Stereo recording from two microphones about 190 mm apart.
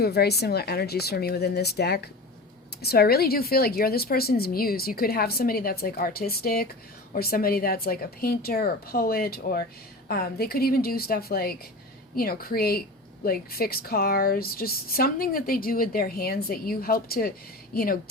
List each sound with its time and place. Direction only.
0.0 s a woman's voice: 55° left (ahead or behind)